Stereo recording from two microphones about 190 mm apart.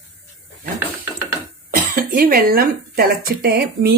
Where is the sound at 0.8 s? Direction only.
15° right (ahead or behind).